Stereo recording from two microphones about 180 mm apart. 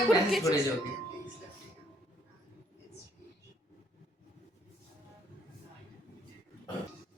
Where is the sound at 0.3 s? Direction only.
Centre (ahead or behind).